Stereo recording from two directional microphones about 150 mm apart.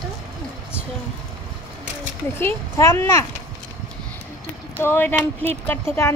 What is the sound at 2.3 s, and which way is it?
Speech, 15° left (ahead or behind).